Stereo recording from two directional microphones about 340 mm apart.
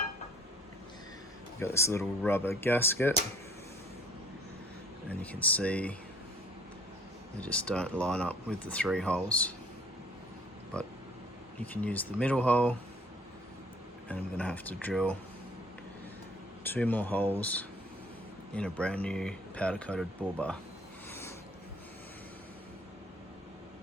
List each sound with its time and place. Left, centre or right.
1.5 s speech: centre
5.0 s speech: centre
7.4 s speech: centre
11.6 s speech: centre
14.1 s speech: centre
16.6 s speech: centre
21.1 s a sound: centre